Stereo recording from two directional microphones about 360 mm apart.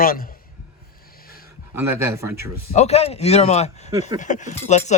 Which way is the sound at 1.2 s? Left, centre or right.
Left.